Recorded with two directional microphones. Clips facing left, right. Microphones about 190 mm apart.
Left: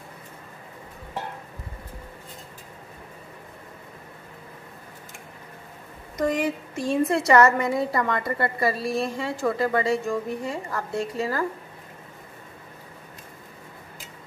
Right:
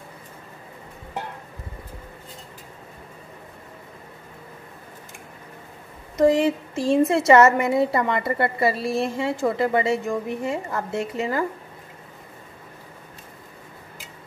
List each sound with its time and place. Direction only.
6.1 s a woman's voice: 25° right (ahead or behind)